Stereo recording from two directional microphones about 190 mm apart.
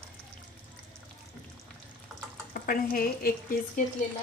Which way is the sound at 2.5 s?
50° left (ahead or behind).